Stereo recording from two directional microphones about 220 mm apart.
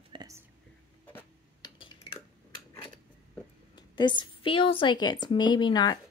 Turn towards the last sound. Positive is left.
turn(degrees=20)  # may be behind; listen again after turning